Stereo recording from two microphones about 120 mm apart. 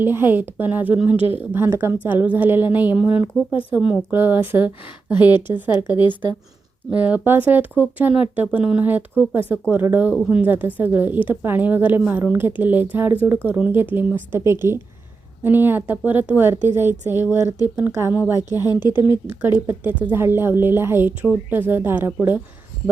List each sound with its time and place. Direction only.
0.0 s a woman's voice: 15° right (ahead or behind)
6.9 s a woman's voice: 15° right (ahead or behind)
18.5 s speech: 35° left (ahead or behind)
18.9 s a woman's voice: 15° right (ahead or behind)